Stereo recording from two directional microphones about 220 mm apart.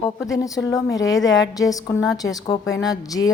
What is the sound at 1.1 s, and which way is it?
Speech, 55° left (ahead or behind).